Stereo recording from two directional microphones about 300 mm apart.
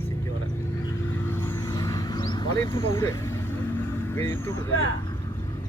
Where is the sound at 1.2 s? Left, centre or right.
Centre.